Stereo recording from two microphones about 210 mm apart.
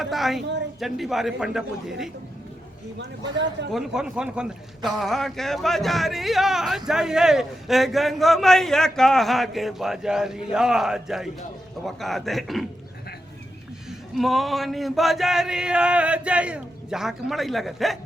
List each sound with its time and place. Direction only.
0.0 s a man's voice: centre (ahead or behind)
3.0 s speech: 55° right (ahead or behind)
3.7 s a man's voice: centre (ahead or behind)
14.2 s a man's voice: centre (ahead or behind)